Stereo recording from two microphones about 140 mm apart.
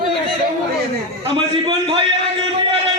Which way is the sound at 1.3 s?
35° right (ahead or behind).